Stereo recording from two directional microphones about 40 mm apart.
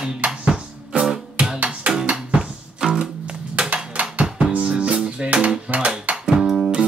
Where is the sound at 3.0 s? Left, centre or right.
Right.